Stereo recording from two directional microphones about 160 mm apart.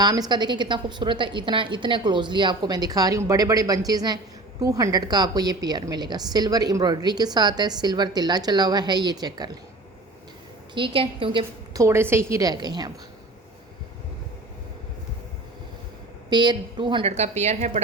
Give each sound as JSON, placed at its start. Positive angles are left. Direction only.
{"t": 0.0, "sound": "a woman's voice", "side_deg": -25}
{"t": 10.8, "sound": "a woman's voice", "side_deg": -35}
{"t": 11.8, "sound": "a woman's voice", "side_deg": -15}
{"t": 16.3, "sound": "a woman's voice", "side_deg": -25}
{"t": 17.1, "sound": "a woman's voice", "side_deg": -45}